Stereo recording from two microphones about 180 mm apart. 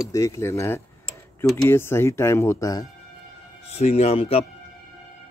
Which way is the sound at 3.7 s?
35° left (ahead or behind).